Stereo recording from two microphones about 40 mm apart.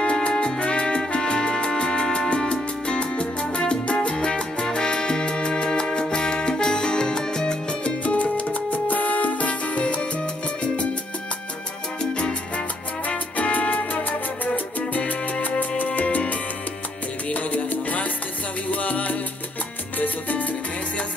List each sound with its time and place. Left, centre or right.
0.0 s music: left
4.1 s salsa music: left
8.0 s music: left
12.0 s salsa music: left
15.8 s music: left
20.0 s salsa music: left